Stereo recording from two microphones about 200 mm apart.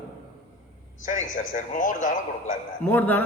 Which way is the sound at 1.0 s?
40° left (ahead or behind).